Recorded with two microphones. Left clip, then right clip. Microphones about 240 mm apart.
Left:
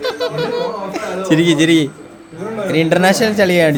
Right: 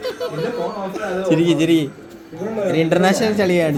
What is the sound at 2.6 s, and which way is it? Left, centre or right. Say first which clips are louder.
Speech: left 3 dB; left.